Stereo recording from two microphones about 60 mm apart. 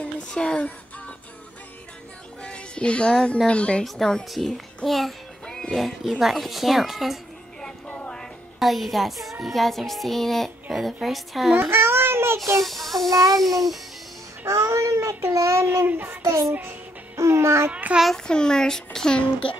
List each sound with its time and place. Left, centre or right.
0.0 s a sound: centre
2.4 s child singing: centre
3.4 s speech: centre
3.8 s child singing: centre
8.5 s child singing: centre
11.7 s baby cry: right
12.6 s child singing: centre
13.1 s child singing: right
13.4 s child singing: centre
14.4 s child singing: right
15.6 s child singing: right
16.2 s child singing: right
17.6 s a child's voice: right
18.1 s speech: centre